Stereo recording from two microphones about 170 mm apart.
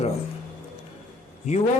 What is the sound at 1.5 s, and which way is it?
Speech, 45° left (ahead or behind).